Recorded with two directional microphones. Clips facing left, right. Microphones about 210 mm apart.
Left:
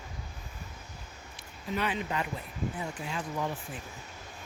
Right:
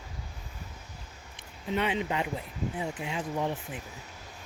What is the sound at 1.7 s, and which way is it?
Speech, 25° right (ahead or behind).